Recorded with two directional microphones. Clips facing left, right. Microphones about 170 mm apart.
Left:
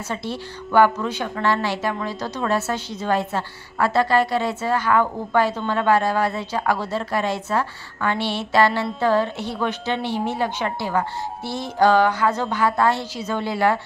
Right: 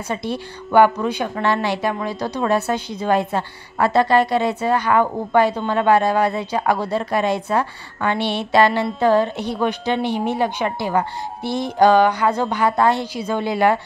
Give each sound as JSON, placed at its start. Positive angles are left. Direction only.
{"t": 0.1, "sound": "a woman's voice", "side_deg": -15}